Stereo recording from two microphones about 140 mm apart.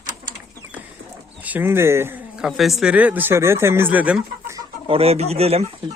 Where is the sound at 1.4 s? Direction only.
10° right (ahead or behind).